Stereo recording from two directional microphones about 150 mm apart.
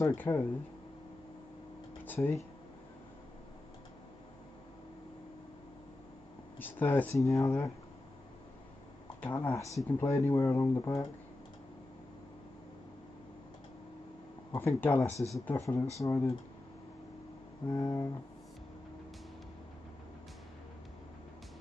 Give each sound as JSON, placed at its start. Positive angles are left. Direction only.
{"t": 0.0, "sound": "speech", "side_deg": 15}
{"t": 2.0, "sound": "speech", "side_deg": 10}
{"t": 6.6, "sound": "speech", "side_deg": 10}
{"t": 9.4, "sound": "speech", "side_deg": 20}
{"t": 14.5, "sound": "speech", "side_deg": 15}
{"t": 17.6, "sound": "speech", "side_deg": 25}